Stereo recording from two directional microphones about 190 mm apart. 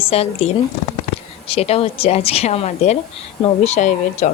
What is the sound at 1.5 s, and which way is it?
A woman's voice, 30° left (ahead or behind).